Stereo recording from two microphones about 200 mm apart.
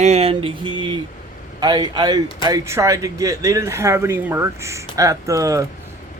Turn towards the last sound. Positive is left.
turn(degrees=-15)  # may be behind; listen again after turning